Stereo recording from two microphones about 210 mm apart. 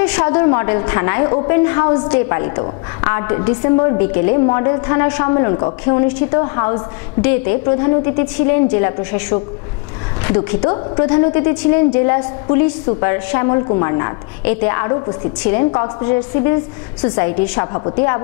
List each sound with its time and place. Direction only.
0.0 s a woman's voice: 25° left (ahead or behind)